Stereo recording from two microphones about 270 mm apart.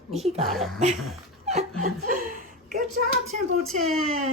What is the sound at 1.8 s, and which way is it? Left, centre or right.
Chuckle, right.